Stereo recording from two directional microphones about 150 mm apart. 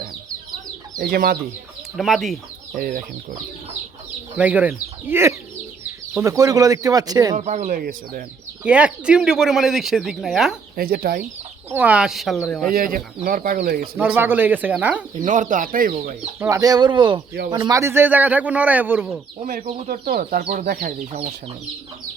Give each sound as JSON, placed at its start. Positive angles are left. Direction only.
{"t": 0.9, "sound": "speech", "side_deg": -80}
{"t": 2.0, "sound": "speech", "side_deg": 0}
{"t": 2.7, "sound": "speech", "side_deg": -65}
{"t": 4.4, "sound": "speech", "side_deg": -10}
{"t": 7.3, "sound": "speech", "side_deg": -50}
{"t": 8.6, "sound": "speech", "side_deg": -10}
{"t": 10.8, "sound": "speech", "side_deg": -80}
{"t": 11.7, "sound": "speech", "side_deg": -10}
{"t": 12.6, "sound": "speech", "side_deg": -70}
{"t": 13.9, "sound": "speech", "side_deg": -10}
{"t": 15.2, "sound": "speech", "side_deg": -55}
{"t": 16.4, "sound": "speech", "side_deg": -20}
{"t": 19.4, "sound": "speech", "side_deg": -65}
{"t": 21.1, "sound": "speech", "side_deg": -45}